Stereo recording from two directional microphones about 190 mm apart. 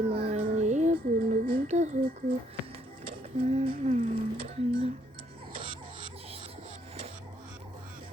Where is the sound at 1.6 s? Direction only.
35° right (ahead or behind).